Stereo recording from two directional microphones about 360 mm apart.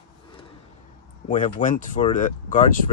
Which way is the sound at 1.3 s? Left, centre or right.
Left.